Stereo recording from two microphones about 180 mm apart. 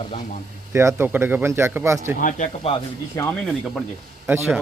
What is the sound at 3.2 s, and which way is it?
Speech, 15° left (ahead or behind).